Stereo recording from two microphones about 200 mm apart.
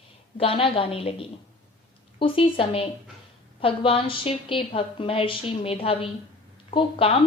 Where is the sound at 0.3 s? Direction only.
30° left (ahead or behind).